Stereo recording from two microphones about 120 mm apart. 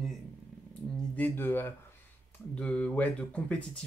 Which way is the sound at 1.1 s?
15° left (ahead or behind).